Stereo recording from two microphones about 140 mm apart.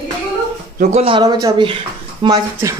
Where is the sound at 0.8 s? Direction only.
55° right (ahead or behind).